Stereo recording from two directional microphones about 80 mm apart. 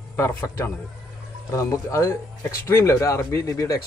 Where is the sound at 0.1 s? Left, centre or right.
Left.